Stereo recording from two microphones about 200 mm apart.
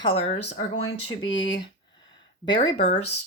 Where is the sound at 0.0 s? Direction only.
30° left (ahead or behind).